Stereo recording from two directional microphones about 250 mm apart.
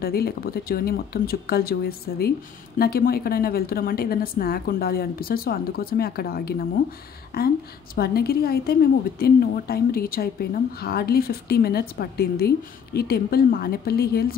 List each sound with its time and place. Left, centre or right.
0.0 s a woman's voice: left